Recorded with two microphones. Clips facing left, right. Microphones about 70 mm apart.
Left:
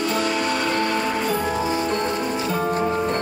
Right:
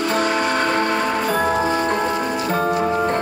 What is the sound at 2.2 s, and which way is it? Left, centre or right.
Music, right.